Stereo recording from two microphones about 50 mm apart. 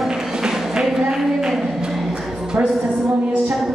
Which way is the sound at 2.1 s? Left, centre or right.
Centre.